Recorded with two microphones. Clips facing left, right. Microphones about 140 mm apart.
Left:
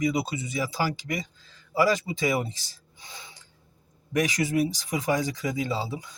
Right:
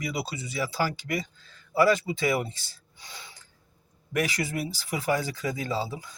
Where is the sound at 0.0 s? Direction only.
20° left (ahead or behind).